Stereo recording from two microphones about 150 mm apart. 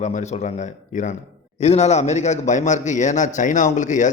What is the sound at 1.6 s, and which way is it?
A man's voice, 45° left (ahead or behind).